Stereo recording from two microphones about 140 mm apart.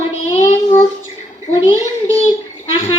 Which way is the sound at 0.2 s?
50° left (ahead or behind).